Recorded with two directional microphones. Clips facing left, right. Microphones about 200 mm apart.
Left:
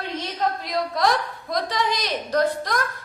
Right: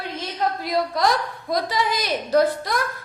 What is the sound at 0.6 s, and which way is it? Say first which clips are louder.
A woman's voice: right 3 dB; centre (ahead or behind).